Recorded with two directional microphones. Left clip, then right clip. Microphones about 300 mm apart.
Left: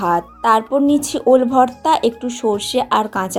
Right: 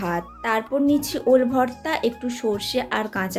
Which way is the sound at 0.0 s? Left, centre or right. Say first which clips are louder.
Left 10 dB; centre.